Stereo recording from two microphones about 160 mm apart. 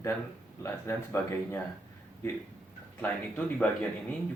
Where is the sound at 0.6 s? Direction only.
15° left (ahead or behind).